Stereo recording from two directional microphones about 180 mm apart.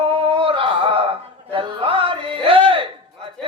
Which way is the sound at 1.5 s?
30° right (ahead or behind).